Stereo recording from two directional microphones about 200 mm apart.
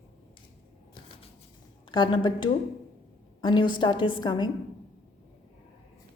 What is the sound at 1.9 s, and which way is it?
A woman's voice, 25° left (ahead or behind).